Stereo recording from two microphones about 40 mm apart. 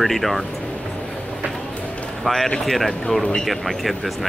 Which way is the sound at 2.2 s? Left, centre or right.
Centre.